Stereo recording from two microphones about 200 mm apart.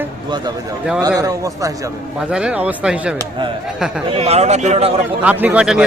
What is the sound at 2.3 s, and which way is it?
Speech, 5° right (ahead or behind).